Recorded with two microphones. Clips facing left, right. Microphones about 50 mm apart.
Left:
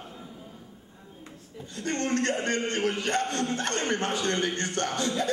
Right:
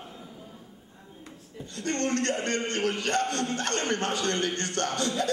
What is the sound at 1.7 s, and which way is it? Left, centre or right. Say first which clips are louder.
A man's voice: even; centre.